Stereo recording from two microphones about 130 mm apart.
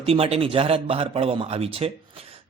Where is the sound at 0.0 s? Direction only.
50° right (ahead or behind).